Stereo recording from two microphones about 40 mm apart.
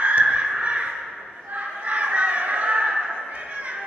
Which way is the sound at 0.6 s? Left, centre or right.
Right.